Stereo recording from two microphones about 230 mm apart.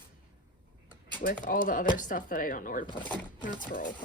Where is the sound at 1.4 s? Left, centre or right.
Left.